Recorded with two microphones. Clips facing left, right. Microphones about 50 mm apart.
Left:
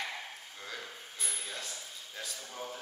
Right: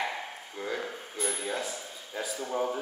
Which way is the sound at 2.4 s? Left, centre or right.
Right.